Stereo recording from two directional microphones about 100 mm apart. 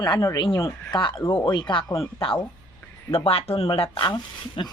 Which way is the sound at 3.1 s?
75° left (ahead or behind).